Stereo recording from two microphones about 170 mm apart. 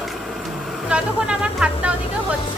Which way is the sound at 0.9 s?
5° right (ahead or behind).